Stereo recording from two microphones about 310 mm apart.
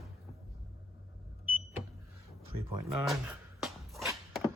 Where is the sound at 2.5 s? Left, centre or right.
Right.